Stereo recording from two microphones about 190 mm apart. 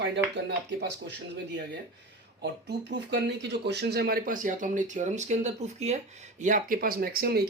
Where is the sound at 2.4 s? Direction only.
60° right (ahead or behind).